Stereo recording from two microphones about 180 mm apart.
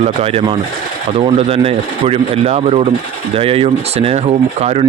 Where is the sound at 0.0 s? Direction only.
35° right (ahead or behind).